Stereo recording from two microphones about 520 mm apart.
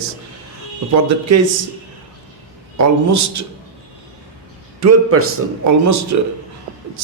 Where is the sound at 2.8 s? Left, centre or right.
Right.